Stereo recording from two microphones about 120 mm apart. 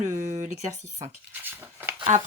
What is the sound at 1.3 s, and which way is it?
Speech, 15° right (ahead or behind).